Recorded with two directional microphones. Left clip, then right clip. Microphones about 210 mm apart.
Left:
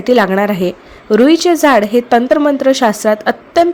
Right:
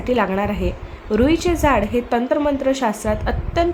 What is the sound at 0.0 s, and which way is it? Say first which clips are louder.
A woman's voice: left 8 dB; 30° left (ahead or behind).